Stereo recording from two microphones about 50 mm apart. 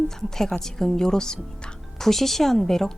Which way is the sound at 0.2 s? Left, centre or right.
Centre.